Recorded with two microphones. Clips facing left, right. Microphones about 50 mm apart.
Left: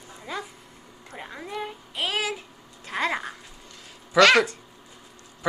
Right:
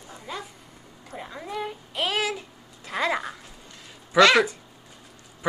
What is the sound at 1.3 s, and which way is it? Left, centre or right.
Speech, centre.